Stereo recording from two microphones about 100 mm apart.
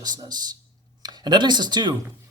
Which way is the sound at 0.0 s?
45° right (ahead or behind).